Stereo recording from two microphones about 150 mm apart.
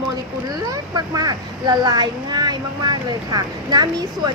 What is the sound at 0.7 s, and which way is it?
Speech, 25° right (ahead or behind).